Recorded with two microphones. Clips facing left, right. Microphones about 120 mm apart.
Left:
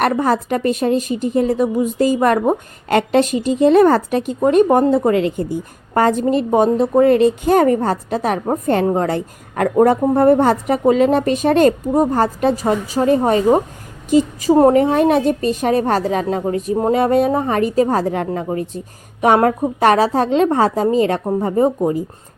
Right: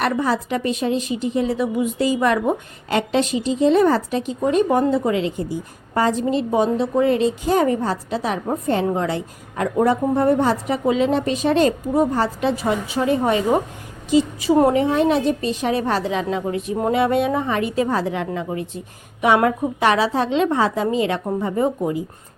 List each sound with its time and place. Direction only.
0.0 s a woman's voice: 50° left (ahead or behind)